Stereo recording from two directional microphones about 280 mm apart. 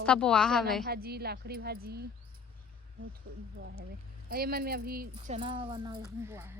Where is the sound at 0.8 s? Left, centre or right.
Right.